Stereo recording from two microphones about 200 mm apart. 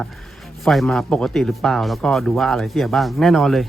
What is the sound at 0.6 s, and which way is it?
Speech, centre (ahead or behind).